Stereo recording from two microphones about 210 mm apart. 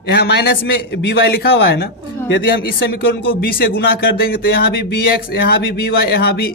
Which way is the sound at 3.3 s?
45° left (ahead or behind).